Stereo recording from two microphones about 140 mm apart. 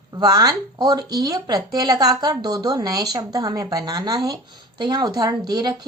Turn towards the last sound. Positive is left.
turn(degrees=-30)  # may be behind; listen again after turning